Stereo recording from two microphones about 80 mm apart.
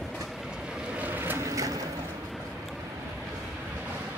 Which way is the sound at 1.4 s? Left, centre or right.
Right.